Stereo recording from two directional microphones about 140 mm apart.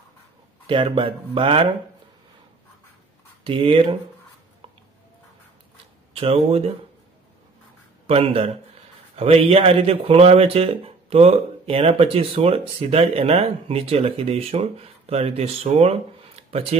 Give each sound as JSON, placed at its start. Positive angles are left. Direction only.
{"t": 0.7, "sound": "speech", "side_deg": -40}
{"t": 3.4, "sound": "speech", "side_deg": -40}
{"t": 6.1, "sound": "speech", "side_deg": -45}
{"t": 8.1, "sound": "speech", "side_deg": -45}